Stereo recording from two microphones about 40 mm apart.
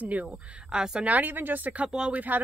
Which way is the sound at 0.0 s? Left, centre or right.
Right.